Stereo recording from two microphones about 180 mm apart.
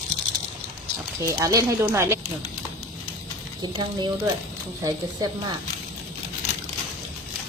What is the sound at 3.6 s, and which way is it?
A woman's voice, 25° right (ahead or behind).